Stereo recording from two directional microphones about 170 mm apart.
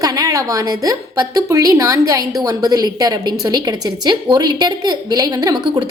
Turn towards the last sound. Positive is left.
turn(degrees=-25)  # may be behind; listen again after turning